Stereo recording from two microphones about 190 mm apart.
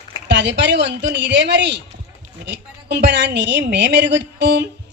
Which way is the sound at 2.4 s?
65° right (ahead or behind).